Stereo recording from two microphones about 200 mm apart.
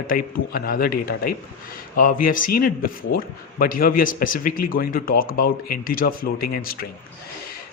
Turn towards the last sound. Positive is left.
turn(degrees=50)  # may be behind; listen again after turning